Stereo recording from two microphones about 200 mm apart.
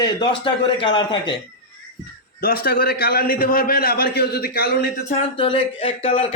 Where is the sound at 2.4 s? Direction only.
50° left (ahead or behind).